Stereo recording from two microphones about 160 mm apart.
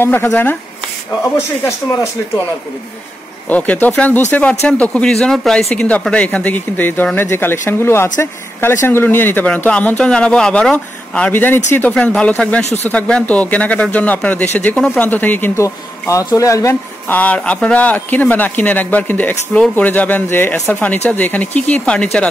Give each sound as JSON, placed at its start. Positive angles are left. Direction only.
{"t": 0.0, "sound": "speech", "side_deg": 15}
{"t": 3.4, "sound": "speech", "side_deg": 10}